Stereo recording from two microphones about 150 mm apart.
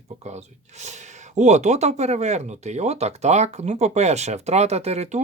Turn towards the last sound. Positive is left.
turn(degrees=-45)  # may be behind; listen again after turning